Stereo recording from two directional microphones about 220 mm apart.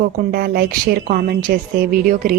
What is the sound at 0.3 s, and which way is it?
A woman's voice, 45° right (ahead or behind).